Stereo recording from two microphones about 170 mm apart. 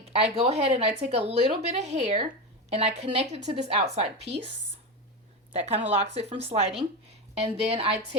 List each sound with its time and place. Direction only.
0.0 s speech: 35° right (ahead or behind)
5.5 s speech: 40° right (ahead or behind)